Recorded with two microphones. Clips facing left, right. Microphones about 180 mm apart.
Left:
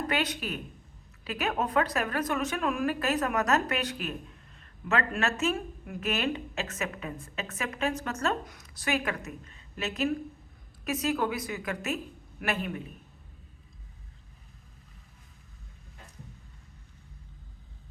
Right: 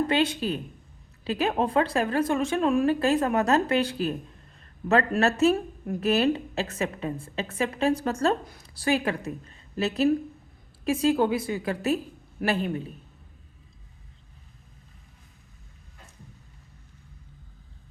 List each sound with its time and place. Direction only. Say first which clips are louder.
0.1 s a woman's voice: right 6 dB; 30° right (ahead or behind)